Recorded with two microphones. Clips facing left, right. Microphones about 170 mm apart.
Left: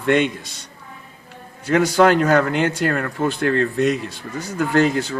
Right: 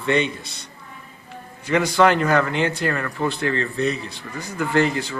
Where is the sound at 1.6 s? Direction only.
45° left (ahead or behind).